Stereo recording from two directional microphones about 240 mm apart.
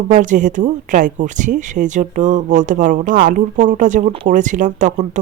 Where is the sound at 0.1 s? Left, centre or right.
Right.